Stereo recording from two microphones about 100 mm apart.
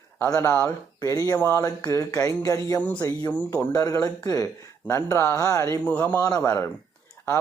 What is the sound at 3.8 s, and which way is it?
Speech, 35° left (ahead or behind).